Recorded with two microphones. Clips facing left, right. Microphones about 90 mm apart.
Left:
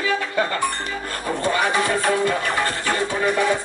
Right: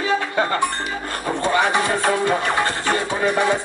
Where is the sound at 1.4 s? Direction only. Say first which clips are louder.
Right 2 dB; 20° right (ahead or behind).